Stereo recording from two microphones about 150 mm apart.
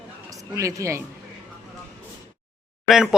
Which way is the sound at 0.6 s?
20° right (ahead or behind).